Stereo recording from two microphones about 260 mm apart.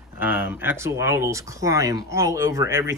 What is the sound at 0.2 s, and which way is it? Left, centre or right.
Speech, centre.